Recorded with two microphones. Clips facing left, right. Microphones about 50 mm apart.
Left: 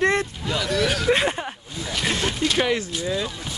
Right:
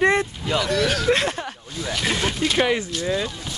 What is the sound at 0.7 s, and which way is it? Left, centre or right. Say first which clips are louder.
Speech: left 1 dB; centre.